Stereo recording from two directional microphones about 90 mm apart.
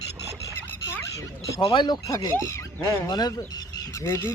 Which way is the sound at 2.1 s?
40° left (ahead or behind).